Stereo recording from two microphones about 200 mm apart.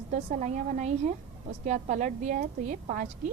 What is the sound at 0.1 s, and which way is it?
A woman's voice, 40° right (ahead or behind).